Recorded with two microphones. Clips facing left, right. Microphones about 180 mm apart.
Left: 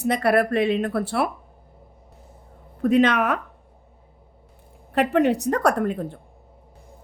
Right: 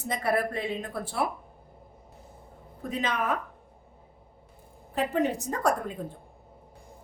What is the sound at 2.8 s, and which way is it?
Speech, 70° left (ahead or behind).